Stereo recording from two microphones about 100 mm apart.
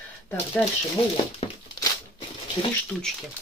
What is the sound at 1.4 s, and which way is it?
Crumpling, 80° left.